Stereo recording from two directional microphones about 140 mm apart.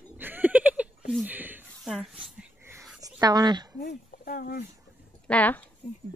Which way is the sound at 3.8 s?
80° left.